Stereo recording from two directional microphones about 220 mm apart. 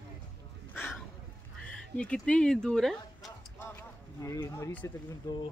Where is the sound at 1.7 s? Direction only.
5° left (ahead or behind).